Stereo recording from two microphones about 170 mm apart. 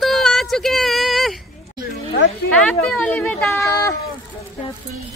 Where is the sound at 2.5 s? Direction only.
5° left (ahead or behind).